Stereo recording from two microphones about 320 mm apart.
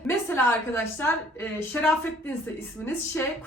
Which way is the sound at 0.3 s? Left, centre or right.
Centre.